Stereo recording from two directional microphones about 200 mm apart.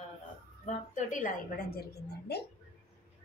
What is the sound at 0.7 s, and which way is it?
A woman's voice, 35° left (ahead or behind).